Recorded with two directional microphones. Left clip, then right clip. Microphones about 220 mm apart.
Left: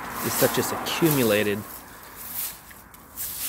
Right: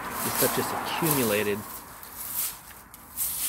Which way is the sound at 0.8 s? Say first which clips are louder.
Left 7 dB; 30° left (ahead or behind).